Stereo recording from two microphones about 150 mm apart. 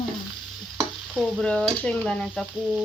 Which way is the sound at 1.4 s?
5° left (ahead or behind).